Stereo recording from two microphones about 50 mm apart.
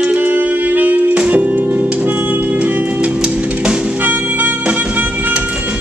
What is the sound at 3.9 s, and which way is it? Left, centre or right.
Music, right.